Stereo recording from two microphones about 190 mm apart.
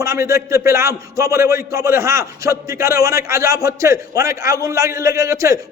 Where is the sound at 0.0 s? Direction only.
15° right (ahead or behind).